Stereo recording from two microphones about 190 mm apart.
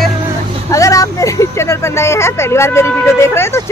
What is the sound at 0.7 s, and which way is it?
Speech, 15° left (ahead or behind).